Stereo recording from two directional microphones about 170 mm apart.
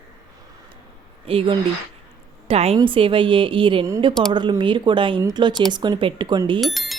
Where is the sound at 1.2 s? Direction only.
35° right (ahead or behind).